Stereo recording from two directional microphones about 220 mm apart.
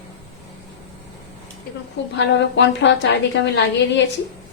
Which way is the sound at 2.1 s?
55° left (ahead or behind).